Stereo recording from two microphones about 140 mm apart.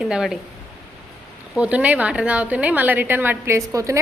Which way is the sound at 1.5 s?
10° right (ahead or behind).